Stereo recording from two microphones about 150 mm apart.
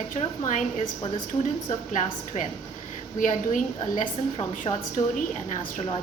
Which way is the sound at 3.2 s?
60° left (ahead or behind).